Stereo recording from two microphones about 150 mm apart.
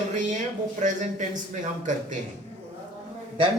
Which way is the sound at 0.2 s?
55° right (ahead or behind).